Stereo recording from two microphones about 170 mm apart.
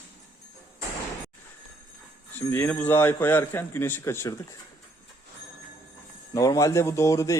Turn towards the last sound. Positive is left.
turn(degrees=20)  # may be behind; listen again after turning